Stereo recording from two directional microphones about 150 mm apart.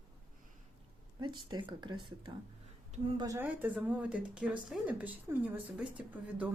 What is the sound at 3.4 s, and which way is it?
Speech, 10° right (ahead or behind).